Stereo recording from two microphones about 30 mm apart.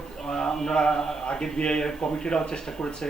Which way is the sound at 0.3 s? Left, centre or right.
Left.